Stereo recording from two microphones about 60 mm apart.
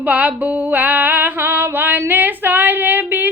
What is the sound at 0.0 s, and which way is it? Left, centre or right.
Female singing, right.